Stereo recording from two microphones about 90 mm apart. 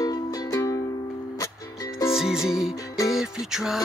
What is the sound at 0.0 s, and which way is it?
Music, 45° left (ahead or behind).